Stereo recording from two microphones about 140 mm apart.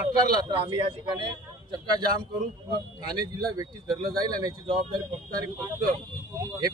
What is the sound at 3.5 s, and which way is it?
Speech, 30° right (ahead or behind).